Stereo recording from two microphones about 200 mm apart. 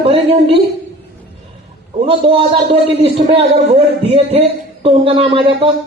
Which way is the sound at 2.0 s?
30° right (ahead or behind).